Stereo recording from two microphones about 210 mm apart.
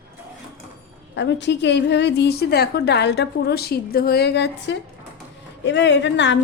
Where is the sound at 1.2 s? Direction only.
55° left (ahead or behind).